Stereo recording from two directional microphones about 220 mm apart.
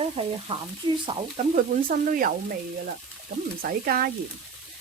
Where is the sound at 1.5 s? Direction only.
40° right (ahead or behind).